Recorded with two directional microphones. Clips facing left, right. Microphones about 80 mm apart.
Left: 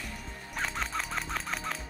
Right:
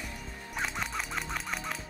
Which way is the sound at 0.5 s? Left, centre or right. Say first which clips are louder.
Left 1 dB; centre.